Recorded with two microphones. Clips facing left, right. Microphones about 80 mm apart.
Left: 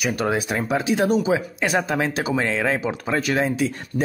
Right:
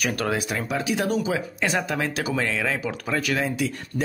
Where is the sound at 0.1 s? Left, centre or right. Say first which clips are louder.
Left 3 dB; left.